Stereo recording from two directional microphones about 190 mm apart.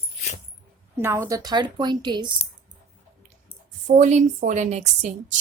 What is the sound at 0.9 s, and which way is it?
Speech, 10° right (ahead or behind).